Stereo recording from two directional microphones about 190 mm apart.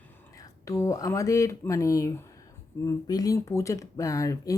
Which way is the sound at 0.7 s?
15° left (ahead or behind).